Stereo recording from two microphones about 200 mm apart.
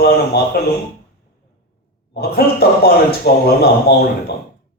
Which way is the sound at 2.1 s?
50° left (ahead or behind).